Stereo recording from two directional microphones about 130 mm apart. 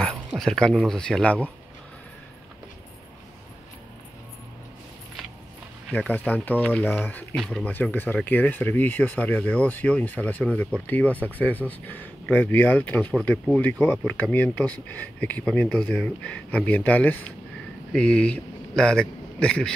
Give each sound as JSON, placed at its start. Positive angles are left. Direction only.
{"t": 0.4, "sound": "speech", "side_deg": 5}
{"t": 5.9, "sound": "speech", "side_deg": 15}
{"t": 7.3, "sound": "speech", "side_deg": 0}
{"t": 7.6, "sound": "speech", "side_deg": 10}